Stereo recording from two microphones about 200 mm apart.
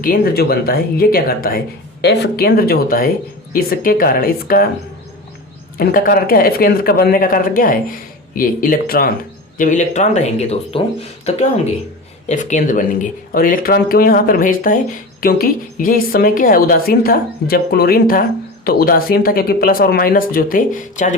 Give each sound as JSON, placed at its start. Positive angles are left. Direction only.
{"t": 0.0, "sound": "speech", "side_deg": 45}
{"t": 5.7, "sound": "speech", "side_deg": 45}